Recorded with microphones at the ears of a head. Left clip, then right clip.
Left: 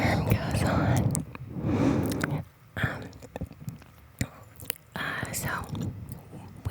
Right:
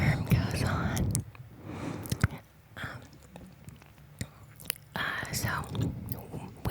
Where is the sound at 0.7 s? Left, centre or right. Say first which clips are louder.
Left 6 dB; left.